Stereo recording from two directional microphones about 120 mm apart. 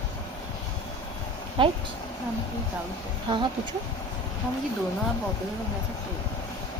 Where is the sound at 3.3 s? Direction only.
40° right (ahead or behind).